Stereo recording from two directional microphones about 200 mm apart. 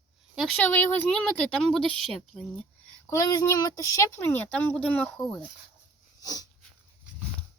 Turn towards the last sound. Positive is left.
turn(degrees=15)  # may be behind; listen again after turning